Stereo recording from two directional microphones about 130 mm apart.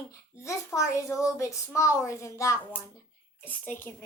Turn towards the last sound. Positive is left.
turn(degrees=15)  # may be behind; listen again after turning